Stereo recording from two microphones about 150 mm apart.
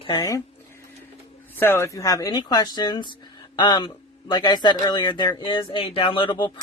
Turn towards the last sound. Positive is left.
turn(degrees=30)  # may be behind; listen again after turning